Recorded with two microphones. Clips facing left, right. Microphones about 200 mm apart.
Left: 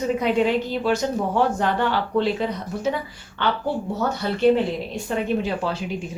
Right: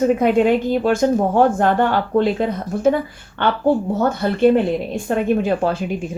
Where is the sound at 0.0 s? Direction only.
50° right (ahead or behind).